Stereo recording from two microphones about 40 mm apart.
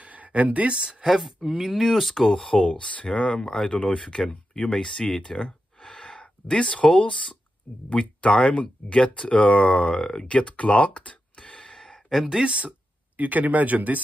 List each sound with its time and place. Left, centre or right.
0.0 s speech: right
1.0 s speech: centre
2.3 s speech: centre
3.3 s speech: left
4.7 s speech: centre
12.1 s speech: centre
12.4 s speech: right
13.1 s speech: right